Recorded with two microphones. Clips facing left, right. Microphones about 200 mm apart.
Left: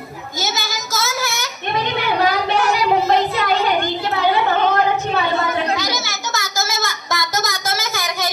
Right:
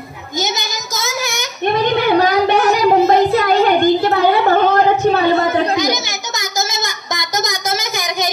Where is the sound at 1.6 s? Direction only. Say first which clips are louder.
Right 8 dB; 45° right (ahead or behind).